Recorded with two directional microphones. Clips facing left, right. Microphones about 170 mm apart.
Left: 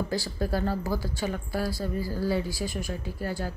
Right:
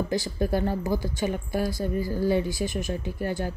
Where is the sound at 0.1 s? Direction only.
20° right (ahead or behind).